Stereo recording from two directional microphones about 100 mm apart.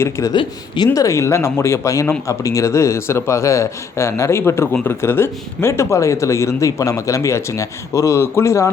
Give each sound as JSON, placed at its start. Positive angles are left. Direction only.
{"t": 0.9, "sound": "speech", "side_deg": 30}